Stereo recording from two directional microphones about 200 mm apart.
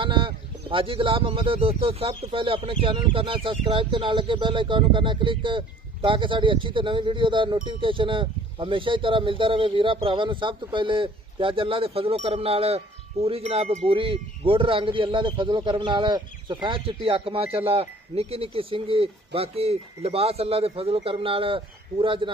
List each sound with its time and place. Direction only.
0.0 s speech: 25° right (ahead or behind)